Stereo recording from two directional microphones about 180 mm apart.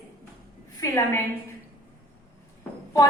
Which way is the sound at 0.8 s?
15° left (ahead or behind).